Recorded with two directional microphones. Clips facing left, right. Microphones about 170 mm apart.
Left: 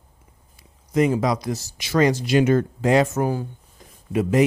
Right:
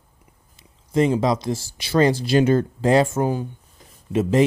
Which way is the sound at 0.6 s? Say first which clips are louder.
Even; 25° right (ahead or behind).